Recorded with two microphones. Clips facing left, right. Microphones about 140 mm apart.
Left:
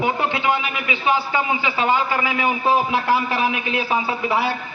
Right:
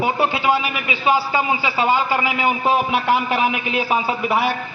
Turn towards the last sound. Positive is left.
turn(degrees=-15)  # may be behind; listen again after turning